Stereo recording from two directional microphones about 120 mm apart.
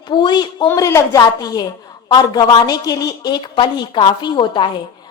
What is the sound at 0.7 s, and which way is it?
A woman's voice, 25° left (ahead or behind).